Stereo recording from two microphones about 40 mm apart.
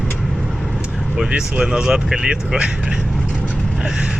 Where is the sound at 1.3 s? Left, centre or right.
Centre.